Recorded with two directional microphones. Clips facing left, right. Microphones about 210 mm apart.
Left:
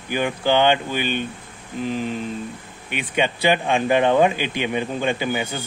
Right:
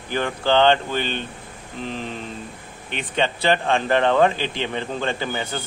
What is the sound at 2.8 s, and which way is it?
A man's voice, 10° left (ahead or behind).